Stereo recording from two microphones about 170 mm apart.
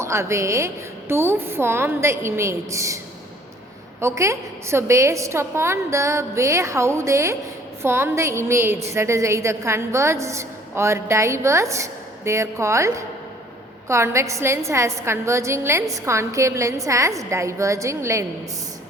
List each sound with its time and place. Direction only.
0.0 s a woman's voice: 15° right (ahead or behind)
4.0 s a woman's voice: 15° right (ahead or behind)